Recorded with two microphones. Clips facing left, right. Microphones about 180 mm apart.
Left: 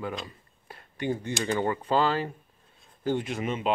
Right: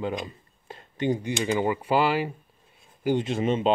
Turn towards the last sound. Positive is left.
turn(degrees=-30)  # may be behind; listen again after turning